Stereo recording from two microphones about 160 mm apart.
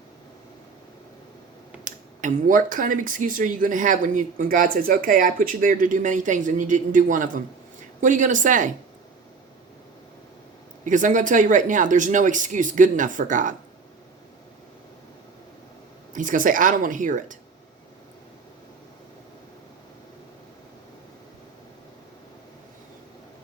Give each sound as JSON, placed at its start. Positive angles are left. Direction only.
{"t": 1.8, "sound": "speech", "side_deg": -55}
{"t": 10.8, "sound": "speech", "side_deg": -55}
{"t": 16.1, "sound": "speech", "side_deg": -55}